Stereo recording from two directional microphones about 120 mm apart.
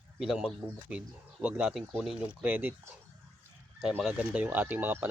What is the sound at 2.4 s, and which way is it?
Speech, 15° right (ahead or behind).